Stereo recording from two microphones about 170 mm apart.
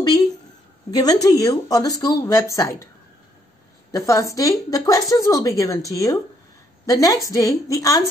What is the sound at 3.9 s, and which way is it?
Speech, 20° left (ahead or behind).